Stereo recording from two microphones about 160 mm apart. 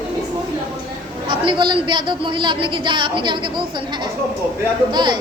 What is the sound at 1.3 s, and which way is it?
A woman's voice, 30° right (ahead or behind).